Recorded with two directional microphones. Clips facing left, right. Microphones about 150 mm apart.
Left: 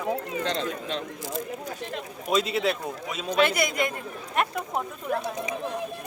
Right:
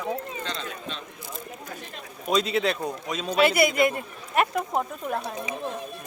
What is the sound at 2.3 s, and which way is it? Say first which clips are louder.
Speech: right 1 dB; 5° left (ahead or behind).